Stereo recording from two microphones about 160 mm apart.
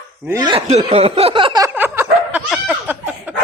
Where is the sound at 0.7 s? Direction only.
40° right (ahead or behind).